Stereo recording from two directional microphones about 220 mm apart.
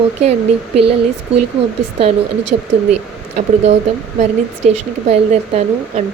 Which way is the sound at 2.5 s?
35° right (ahead or behind).